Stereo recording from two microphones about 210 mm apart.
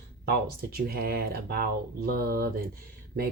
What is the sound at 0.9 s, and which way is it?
Speech, 45° right (ahead or behind).